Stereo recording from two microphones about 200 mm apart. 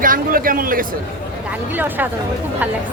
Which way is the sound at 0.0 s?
45° right (ahead or behind).